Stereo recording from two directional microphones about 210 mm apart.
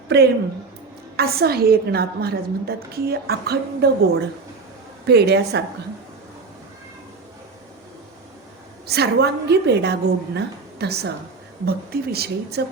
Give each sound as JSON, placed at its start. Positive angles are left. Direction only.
{"t": 0.1, "sound": "a woman's voice", "side_deg": -55}
{"t": 5.0, "sound": "a woman's voice", "side_deg": -50}
{"t": 8.9, "sound": "a woman's voice", "side_deg": -50}